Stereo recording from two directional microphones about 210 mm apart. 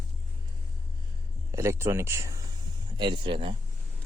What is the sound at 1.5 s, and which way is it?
Speech, 15° right (ahead or behind).